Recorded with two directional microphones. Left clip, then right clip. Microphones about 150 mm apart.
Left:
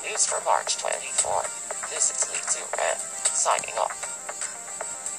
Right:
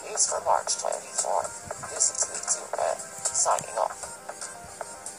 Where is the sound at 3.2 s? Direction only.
20° left (ahead or behind).